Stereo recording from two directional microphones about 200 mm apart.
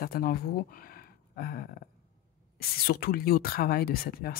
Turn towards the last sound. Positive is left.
turn(degrees=50)  # may be behind; listen again after turning